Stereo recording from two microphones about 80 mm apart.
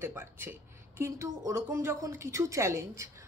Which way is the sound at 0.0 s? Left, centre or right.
Right.